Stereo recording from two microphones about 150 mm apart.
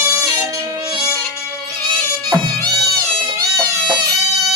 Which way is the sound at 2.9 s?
25° right (ahead or behind).